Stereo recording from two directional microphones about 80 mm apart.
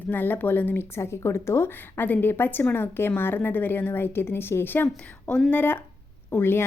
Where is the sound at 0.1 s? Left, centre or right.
Left.